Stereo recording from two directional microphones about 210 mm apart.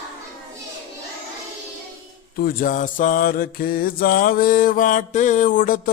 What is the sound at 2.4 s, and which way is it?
Mantra, 40° left (ahead or behind).